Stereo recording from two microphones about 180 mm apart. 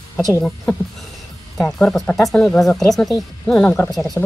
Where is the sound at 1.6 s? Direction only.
Centre (ahead or behind).